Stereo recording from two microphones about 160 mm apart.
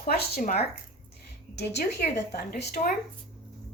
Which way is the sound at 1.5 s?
90° left.